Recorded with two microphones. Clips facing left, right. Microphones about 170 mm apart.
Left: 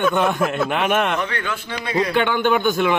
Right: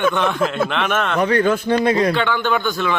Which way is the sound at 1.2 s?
40° right (ahead or behind).